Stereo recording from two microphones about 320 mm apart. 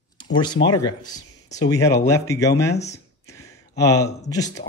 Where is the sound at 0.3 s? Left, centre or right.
Centre.